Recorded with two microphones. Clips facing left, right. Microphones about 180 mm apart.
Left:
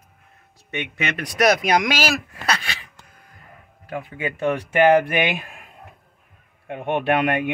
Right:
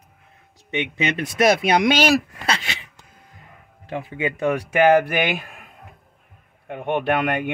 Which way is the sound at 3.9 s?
25° right (ahead or behind).